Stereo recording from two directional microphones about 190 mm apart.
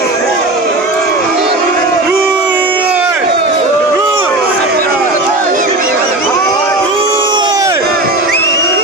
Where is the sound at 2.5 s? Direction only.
10° right (ahead or behind).